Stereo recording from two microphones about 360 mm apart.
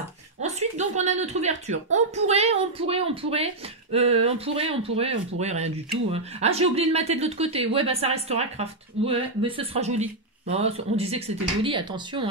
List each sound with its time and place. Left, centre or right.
0.4 s speech: centre